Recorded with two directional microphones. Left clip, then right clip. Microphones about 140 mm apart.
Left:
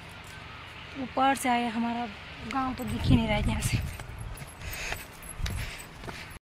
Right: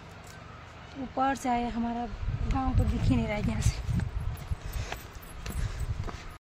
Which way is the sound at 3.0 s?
10° right (ahead or behind).